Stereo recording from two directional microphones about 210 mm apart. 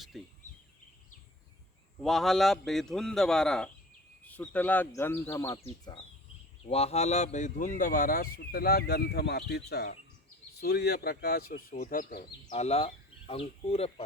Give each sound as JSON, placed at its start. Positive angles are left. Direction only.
{"t": 0.1, "sound": "a man's voice", "side_deg": 0}
{"t": 2.0, "sound": "a man's voice", "side_deg": 0}
{"t": 5.6, "sound": "speech", "side_deg": 25}
{"t": 12.5, "sound": "speech", "side_deg": 30}